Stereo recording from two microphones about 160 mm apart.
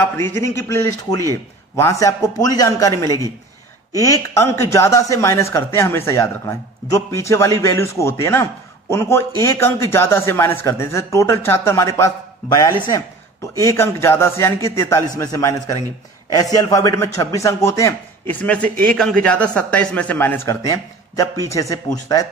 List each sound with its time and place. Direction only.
0.0 s a man's voice: 15° left (ahead or behind)